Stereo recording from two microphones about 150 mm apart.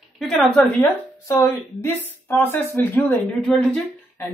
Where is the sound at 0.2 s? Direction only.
Centre (ahead or behind).